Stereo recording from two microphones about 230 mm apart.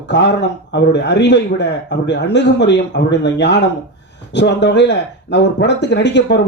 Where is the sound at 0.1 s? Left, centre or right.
Left.